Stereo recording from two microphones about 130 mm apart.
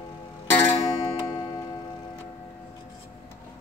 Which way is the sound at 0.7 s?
45° left (ahead or behind).